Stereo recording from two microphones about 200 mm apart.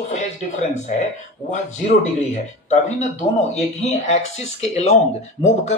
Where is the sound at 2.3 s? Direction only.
35° left (ahead or behind).